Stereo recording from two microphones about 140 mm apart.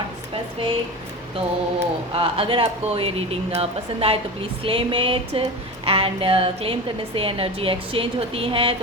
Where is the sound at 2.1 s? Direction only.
40° right (ahead or behind).